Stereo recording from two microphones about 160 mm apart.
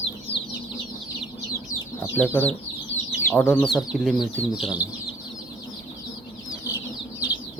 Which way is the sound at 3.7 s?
Centre (ahead or behind).